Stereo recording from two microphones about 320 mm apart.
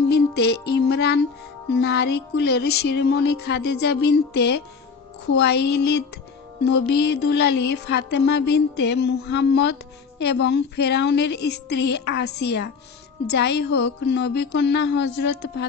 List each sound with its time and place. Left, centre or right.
0.1 s music: left